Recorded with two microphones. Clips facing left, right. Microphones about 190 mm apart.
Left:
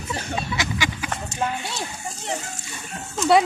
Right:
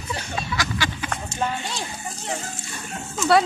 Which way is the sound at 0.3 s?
20° left (ahead or behind).